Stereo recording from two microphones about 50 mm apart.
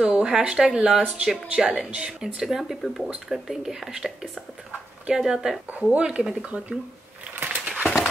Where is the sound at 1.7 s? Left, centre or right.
Right.